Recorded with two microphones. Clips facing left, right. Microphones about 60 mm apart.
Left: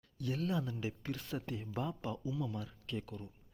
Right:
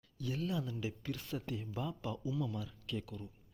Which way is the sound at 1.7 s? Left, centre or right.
Left.